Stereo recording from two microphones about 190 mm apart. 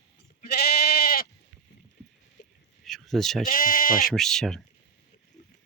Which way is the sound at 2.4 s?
60° left (ahead or behind).